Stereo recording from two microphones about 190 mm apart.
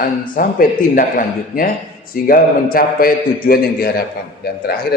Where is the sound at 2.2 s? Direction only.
50° left (ahead or behind).